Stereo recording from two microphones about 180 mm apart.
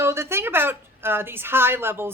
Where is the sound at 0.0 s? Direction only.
15° right (ahead or behind).